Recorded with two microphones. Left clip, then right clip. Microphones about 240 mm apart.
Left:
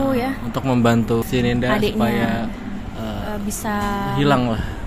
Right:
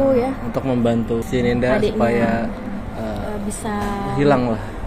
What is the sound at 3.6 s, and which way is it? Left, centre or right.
Speech, left.